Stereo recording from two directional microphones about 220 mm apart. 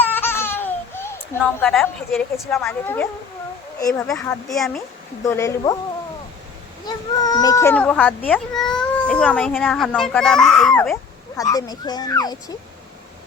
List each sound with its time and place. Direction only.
0.0 s baby laughter: 10° left (ahead or behind)
2.6 s speech: 10° left (ahead or behind)
5.2 s speech: 15° left (ahead or behind)
6.8 s speech: 15° left (ahead or behind)
11.3 s speech: 15° left (ahead or behind)